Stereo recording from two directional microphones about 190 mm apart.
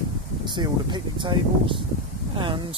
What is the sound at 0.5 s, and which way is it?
Speech, 25° right (ahead or behind).